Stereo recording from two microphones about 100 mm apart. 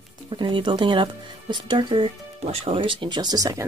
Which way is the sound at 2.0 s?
80° right.